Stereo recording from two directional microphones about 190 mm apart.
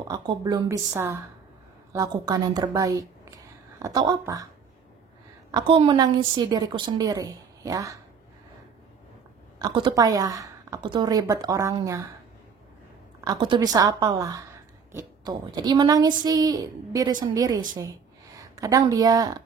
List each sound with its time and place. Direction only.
0.1 s a woman's voice: 20° right (ahead or behind)
5.5 s a woman's voice: 25° right (ahead or behind)
9.6 s a woman's voice: 20° right (ahead or behind)
13.2 s a woman's voice: 20° right (ahead or behind)